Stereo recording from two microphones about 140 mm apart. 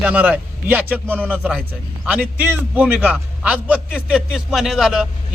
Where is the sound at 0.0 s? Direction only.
10° right (ahead or behind).